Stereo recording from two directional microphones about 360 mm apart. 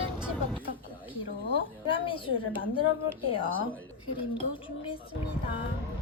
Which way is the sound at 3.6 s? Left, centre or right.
Left.